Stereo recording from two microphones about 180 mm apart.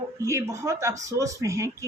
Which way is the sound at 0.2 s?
15° right (ahead or behind).